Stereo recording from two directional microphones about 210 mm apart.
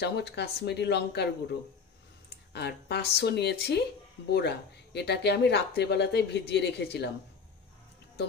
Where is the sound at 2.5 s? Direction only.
50° left (ahead or behind).